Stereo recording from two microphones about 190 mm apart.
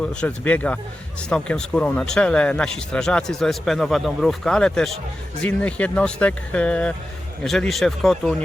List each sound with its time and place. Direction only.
0.1 s a man's voice: 5° left (ahead or behind)